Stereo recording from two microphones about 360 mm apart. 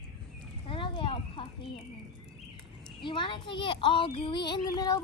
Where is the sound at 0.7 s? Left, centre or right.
Centre.